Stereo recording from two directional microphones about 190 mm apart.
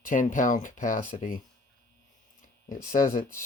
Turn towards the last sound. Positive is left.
turn(degrees=45)  # may be behind; listen again after turning